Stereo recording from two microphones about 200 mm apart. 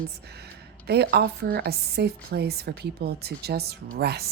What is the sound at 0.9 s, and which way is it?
A woman's voice, 55° right (ahead or behind).